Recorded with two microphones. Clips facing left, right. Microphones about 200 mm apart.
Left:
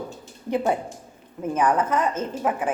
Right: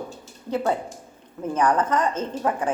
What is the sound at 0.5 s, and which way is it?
A woman's voice, 15° left (ahead or behind).